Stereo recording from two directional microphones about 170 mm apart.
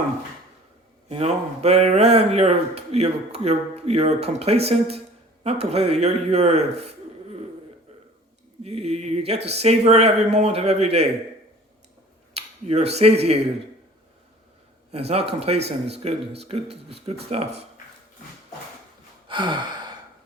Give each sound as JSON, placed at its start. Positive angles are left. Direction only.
{"t": 1.0, "sound": "speech", "side_deg": -40}
{"t": 8.6, "sound": "speech", "side_deg": -40}
{"t": 12.3, "sound": "speech", "side_deg": -35}
{"t": 14.9, "sound": "speech", "side_deg": -35}
{"t": 19.3, "sound": "gasp", "side_deg": -30}